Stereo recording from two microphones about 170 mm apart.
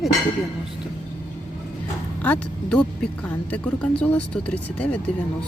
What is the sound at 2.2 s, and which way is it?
Speech, 5° left (ahead or behind).